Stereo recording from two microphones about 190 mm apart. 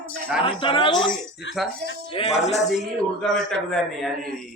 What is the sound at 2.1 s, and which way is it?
Speech, 35° left (ahead or behind).